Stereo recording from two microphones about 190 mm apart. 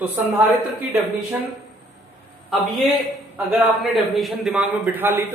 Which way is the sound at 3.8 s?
Centre (ahead or behind).